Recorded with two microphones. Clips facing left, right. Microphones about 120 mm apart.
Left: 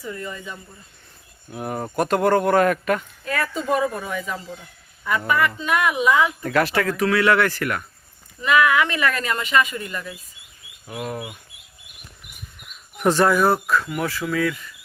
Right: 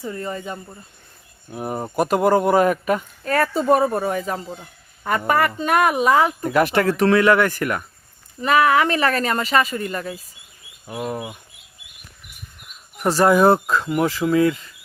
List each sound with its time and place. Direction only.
0.0 s speech: 35° right (ahead or behind)
1.5 s speech: 5° right (ahead or behind)
3.2 s speech: 40° right (ahead or behind)
6.4 s speech: 15° right (ahead or behind)
8.4 s speech: 40° right (ahead or behind)
11.0 s speech: 15° right (ahead or behind)
13.0 s speech: 5° right (ahead or behind)
13.2 s speech: 20° right (ahead or behind)